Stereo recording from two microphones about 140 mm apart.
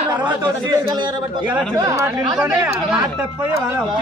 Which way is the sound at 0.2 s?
35° right (ahead or behind).